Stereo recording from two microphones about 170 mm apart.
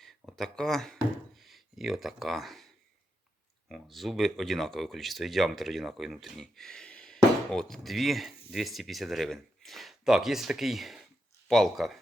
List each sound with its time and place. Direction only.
0.0 s speech: centre (ahead or behind)
3.7 s speech: centre (ahead or behind)